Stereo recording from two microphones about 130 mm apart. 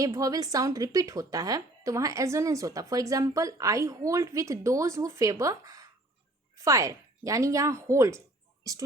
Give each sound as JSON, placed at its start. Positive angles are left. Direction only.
{"t": 0.0, "sound": "speech", "side_deg": -25}